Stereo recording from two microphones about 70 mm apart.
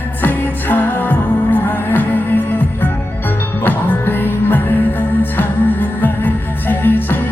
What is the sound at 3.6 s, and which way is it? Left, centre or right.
Music, left.